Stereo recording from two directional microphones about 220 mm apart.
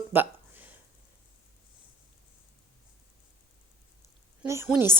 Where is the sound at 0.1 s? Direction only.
10° right (ahead or behind).